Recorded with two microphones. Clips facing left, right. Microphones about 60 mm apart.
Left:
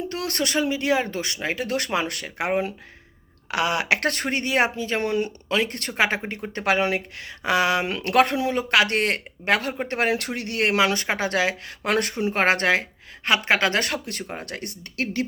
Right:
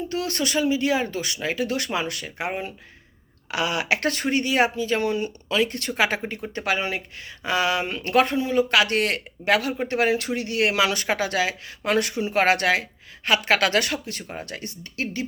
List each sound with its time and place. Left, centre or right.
0.1 s speech: left
3.5 s a woman's voice: left
13.9 s speech: left